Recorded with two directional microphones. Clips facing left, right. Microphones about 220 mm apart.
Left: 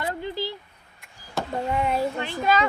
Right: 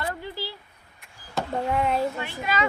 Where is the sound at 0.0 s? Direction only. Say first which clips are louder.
Left 3 dB; 20° left (ahead or behind).